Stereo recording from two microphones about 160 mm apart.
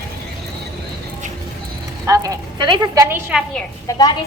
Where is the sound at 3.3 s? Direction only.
5° right (ahead or behind).